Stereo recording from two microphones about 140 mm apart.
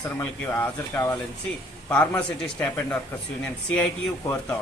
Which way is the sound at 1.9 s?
10° left (ahead or behind).